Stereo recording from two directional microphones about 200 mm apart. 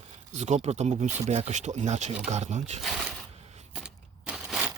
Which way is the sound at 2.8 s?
Centre (ahead or behind).